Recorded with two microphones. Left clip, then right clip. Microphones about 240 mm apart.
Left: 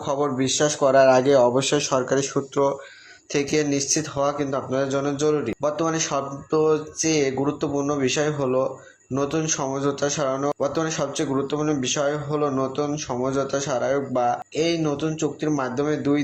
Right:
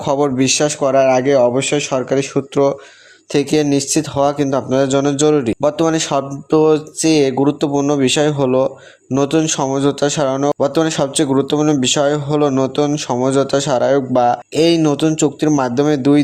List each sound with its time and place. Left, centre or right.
0.0 s speech: right
0.6 s a man's voice: right
3.3 s speech: right